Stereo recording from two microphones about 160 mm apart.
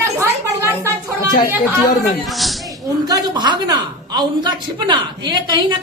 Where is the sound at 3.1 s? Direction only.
25° right (ahead or behind).